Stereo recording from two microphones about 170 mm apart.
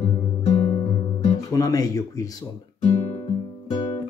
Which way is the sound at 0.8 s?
25° left (ahead or behind).